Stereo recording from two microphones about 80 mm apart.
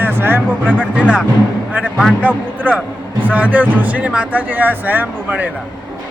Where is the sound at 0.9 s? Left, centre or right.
Centre.